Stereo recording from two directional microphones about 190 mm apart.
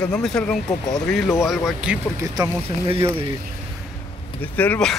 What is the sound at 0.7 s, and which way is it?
Speech, 20° left (ahead or behind).